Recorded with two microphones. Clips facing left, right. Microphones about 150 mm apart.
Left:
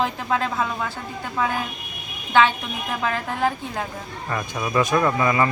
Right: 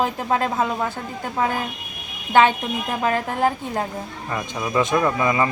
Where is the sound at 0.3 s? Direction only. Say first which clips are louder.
Right 2 dB; 40° right (ahead or behind).